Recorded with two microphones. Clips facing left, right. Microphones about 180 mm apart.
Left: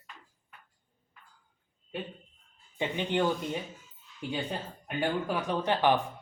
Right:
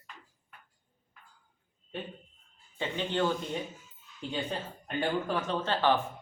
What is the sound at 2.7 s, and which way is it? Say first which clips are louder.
Speech: left 2 dB; 15° left (ahead or behind).